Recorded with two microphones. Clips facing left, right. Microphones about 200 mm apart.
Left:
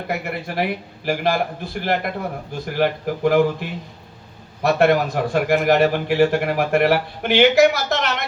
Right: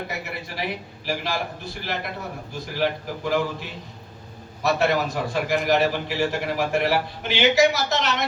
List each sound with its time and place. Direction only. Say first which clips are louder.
0.1 s a man's voice: left 7 dB; 55° left (ahead or behind)